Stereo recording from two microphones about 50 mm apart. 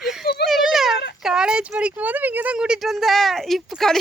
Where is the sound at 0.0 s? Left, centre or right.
Centre; by 2.6 s right.